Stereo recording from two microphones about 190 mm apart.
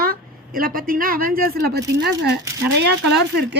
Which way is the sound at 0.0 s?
50° right (ahead or behind).